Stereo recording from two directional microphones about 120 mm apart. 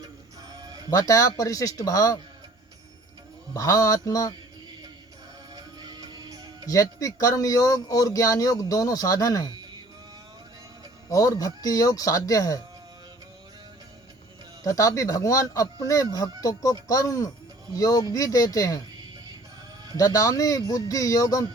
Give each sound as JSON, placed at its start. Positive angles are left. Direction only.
{"t": 0.0, "sound": "music", "side_deg": -35}
{"t": 0.9, "sound": "speech", "side_deg": 30}
{"t": 3.5, "sound": "speech", "side_deg": 30}
{"t": 5.5, "sound": "music", "side_deg": -35}
{"t": 6.7, "sound": "speech", "side_deg": 30}
{"t": 11.1, "sound": "speech", "side_deg": 30}
{"t": 14.6, "sound": "speech", "side_deg": 30}
{"t": 20.0, "sound": "speech", "side_deg": 30}